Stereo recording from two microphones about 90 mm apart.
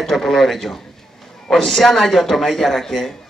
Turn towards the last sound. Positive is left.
turn(degrees=5)  # may be behind; listen again after turning